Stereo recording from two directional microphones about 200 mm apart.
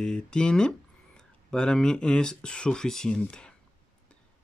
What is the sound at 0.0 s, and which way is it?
Speech, 5° left (ahead or behind).